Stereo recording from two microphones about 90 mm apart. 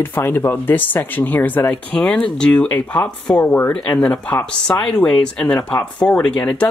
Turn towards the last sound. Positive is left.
turn(degrees=15)  # may be behind; listen again after turning